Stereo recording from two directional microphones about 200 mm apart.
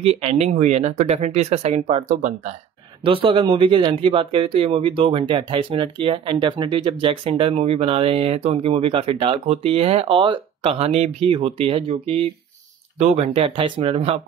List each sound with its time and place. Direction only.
0.0 s speech: 30° right (ahead or behind)